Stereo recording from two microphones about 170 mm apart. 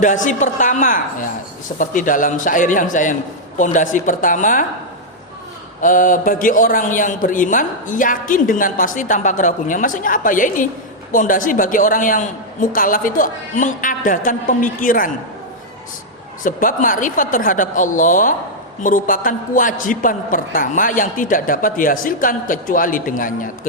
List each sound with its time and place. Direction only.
0.0 s a man's voice: 45° left (ahead or behind)
5.8 s a man's voice: 50° left (ahead or behind)
16.4 s a man's voice: 50° left (ahead or behind)